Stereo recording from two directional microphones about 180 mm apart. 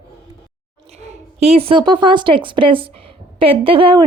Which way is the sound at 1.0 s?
35° right (ahead or behind).